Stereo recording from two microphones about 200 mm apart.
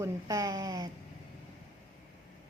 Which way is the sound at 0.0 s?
15° right (ahead or behind).